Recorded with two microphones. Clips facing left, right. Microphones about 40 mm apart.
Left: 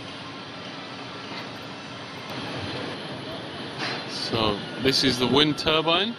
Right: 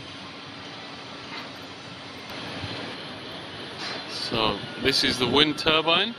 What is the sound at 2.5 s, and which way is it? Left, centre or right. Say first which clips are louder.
Vehicle: left 2 dB; centre.